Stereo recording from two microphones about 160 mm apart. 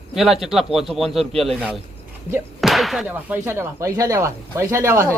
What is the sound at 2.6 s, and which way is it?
Whip, centre (ahead or behind).